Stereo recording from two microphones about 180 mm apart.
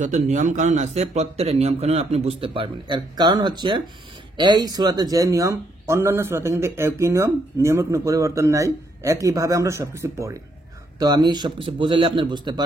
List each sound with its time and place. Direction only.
0.0 s a man's voice: 40° right (ahead or behind); by 12.6 s 25° right (ahead or behind)